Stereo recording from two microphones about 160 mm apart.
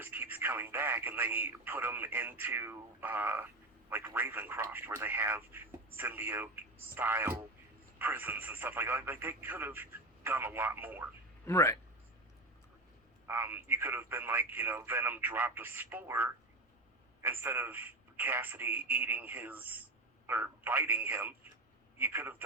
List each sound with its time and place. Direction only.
0.0 s speech: 15° right (ahead or behind)
11.4 s a man's voice: 20° left (ahead or behind)
13.2 s speech: 15° right (ahead or behind)